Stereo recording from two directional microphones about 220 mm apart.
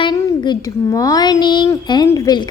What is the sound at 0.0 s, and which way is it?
A child's voice, 20° left (ahead or behind).